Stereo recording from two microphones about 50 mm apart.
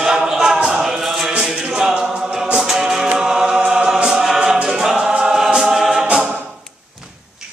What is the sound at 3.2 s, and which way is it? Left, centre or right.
Choir, centre.